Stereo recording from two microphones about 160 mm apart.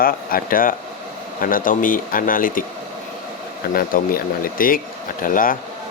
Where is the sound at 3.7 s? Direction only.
65° left (ahead or behind).